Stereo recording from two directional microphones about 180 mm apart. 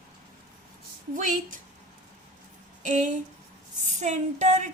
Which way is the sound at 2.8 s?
45° right (ahead or behind).